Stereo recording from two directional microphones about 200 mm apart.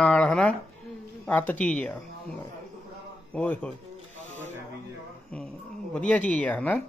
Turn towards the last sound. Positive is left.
turn(degrees=5)  # may be behind; listen again after turning